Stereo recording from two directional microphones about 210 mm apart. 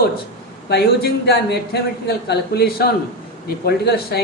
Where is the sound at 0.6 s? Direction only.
50° left (ahead or behind).